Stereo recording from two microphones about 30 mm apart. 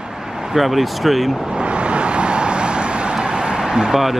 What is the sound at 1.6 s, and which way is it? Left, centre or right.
Vehicle, right.